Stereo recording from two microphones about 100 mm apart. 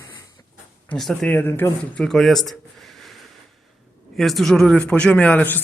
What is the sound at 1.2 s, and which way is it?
Speech, 20° left (ahead or behind).